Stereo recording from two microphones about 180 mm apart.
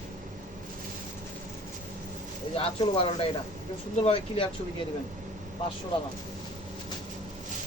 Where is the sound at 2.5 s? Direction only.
30° left (ahead or behind).